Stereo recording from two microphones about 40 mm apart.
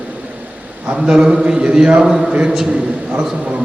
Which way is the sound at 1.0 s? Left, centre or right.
Right.